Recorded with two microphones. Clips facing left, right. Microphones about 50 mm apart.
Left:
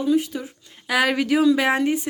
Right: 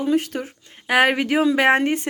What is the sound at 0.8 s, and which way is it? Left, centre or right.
A woman's voice, right.